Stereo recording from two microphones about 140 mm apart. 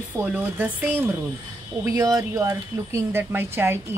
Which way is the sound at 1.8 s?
25° right (ahead or behind).